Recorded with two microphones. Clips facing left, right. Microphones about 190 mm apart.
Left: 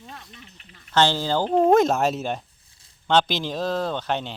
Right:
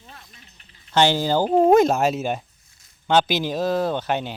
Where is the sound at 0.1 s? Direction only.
65° left (ahead or behind).